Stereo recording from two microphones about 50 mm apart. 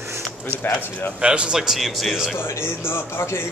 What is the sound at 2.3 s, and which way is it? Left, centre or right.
Speech, left.